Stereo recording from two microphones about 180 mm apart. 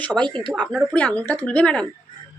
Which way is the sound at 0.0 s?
5° left (ahead or behind).